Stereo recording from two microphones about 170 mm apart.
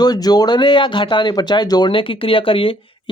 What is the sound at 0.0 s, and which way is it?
Speech, 25° left (ahead or behind).